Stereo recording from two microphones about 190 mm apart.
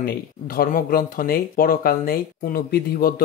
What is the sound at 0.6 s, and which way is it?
Speech, 50° left (ahead or behind).